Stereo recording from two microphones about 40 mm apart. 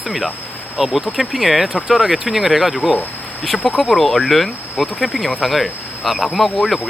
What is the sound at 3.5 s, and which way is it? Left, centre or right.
Speech, left.